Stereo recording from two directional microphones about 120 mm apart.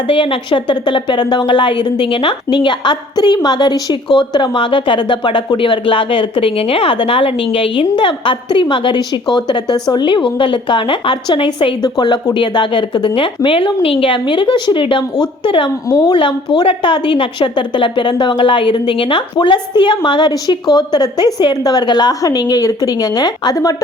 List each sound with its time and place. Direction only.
0.1 s a woman's voice: 45° left (ahead or behind)
15.9 s a woman's voice: 30° left (ahead or behind)
16.1 s a woman's voice: 45° left (ahead or behind)